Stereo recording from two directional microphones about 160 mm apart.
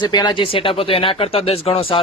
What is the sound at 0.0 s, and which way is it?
Speech, 25° left (ahead or behind).